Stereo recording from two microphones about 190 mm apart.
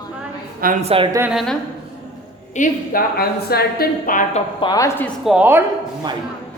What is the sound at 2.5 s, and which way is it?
A woman's voice, 45° left (ahead or behind).